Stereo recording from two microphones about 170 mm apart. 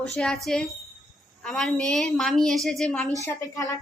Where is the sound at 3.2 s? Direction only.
20° left (ahead or behind).